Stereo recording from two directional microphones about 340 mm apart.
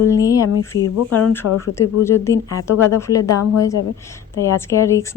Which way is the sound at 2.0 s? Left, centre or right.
Centre.